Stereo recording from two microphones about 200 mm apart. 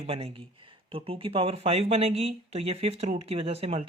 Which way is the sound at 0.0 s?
30° right (ahead or behind).